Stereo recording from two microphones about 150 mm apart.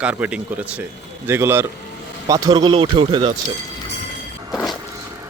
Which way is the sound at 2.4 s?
30° right (ahead or behind).